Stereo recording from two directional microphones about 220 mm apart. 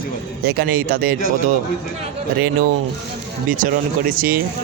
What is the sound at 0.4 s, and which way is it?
Speech, 45° right (ahead or behind).